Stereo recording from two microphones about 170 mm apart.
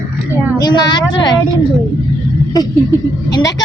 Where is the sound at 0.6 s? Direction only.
25° left (ahead or behind).